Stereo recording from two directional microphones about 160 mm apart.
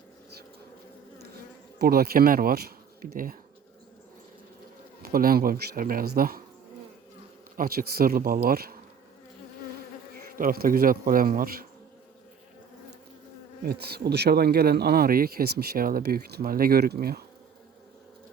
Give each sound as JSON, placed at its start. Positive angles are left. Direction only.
{"t": 1.8, "sound": "speech", "side_deg": -75}
{"t": 5.0, "sound": "speech", "side_deg": -65}
{"t": 7.5, "sound": "speech", "side_deg": -65}
{"t": 10.3, "sound": "speech", "side_deg": -65}
{"t": 13.7, "sound": "speech", "side_deg": -80}